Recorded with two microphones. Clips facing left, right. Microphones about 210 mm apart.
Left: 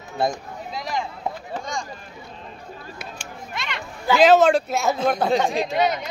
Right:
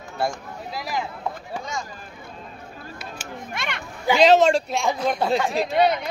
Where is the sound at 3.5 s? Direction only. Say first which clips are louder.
Even; 55° right (ahead or behind).